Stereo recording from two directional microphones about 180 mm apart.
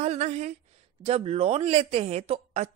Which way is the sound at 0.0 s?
35° right (ahead or behind).